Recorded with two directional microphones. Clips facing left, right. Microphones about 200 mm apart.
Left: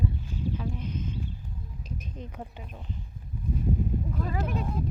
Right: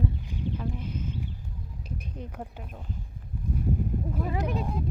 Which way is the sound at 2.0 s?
10° right (ahead or behind).